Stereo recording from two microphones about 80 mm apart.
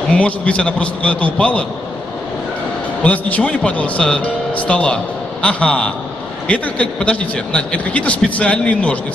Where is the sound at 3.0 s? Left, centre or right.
Centre.